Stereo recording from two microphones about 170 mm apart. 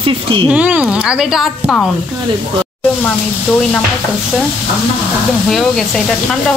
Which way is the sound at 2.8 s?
10° left (ahead or behind).